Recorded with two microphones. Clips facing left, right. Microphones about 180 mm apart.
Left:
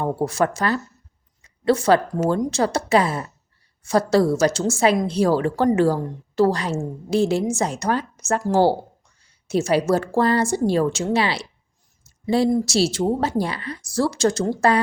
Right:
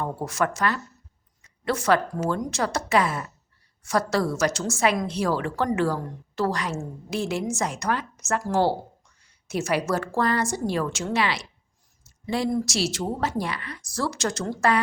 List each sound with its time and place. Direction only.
0.0 s a woman's voice: 30° left (ahead or behind)